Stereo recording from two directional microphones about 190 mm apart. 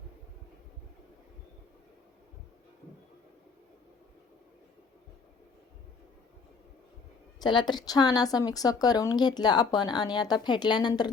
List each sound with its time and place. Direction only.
7.4 s a woman's voice: 25° left (ahead or behind)